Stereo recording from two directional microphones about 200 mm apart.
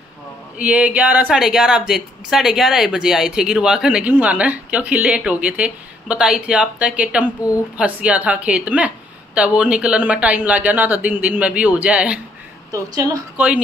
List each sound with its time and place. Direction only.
0.6 s a woman's voice: 5° right (ahead or behind)